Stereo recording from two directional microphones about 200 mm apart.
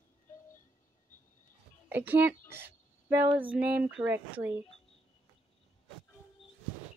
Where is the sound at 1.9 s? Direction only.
10° right (ahead or behind).